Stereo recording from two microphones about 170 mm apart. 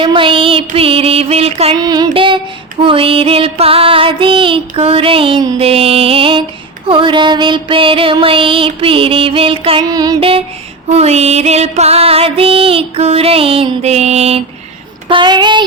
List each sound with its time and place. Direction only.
0.0 s music: 30° right (ahead or behind)
1.8 s child singing: 25° right (ahead or behind)
2.8 s music: 30° right (ahead or behind)
15.0 s child singing: 25° right (ahead or behind)